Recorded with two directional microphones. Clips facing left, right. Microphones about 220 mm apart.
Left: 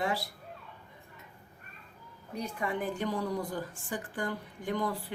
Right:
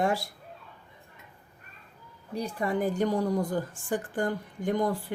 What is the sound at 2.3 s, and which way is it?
A woman's voice, 35° right (ahead or behind).